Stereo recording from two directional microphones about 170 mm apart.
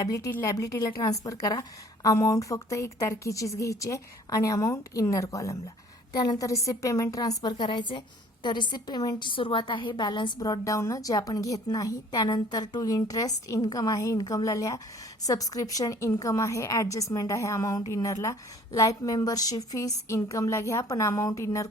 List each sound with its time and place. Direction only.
0.0 s a woman's voice: 20° left (ahead or behind)